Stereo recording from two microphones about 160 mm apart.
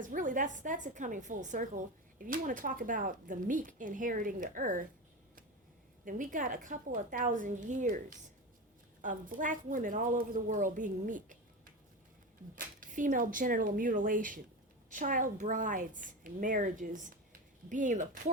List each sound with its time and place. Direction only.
0.0 s a woman's voice: 55° right (ahead or behind)
6.1 s a woman's voice: 55° right (ahead or behind)